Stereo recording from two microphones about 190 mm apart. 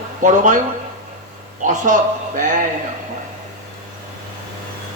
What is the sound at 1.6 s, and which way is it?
Speech, 40° right (ahead or behind).